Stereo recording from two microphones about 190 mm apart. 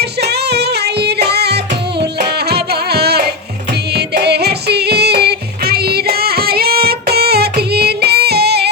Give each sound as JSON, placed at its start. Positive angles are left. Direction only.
{"t": 0.0, "sound": "music", "side_deg": -60}